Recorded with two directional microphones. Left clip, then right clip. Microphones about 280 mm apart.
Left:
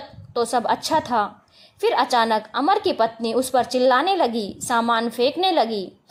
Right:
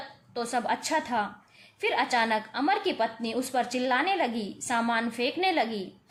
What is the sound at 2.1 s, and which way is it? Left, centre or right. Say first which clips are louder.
A woman's voice: left 7 dB; left.